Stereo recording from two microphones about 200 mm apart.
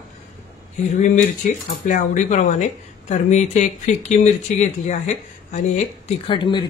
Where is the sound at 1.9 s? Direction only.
40° left (ahead or behind).